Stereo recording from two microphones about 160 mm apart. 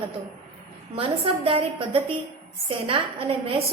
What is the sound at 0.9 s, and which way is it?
A woman's voice, 35° right (ahead or behind).